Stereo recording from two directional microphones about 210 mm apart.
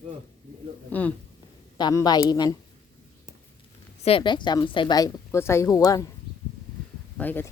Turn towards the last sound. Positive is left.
turn(degrees=10)  # may be behind; listen again after turning